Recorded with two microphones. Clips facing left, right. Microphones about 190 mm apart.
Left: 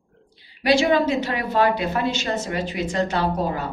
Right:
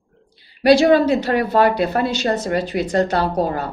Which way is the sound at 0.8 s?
35° right (ahead or behind).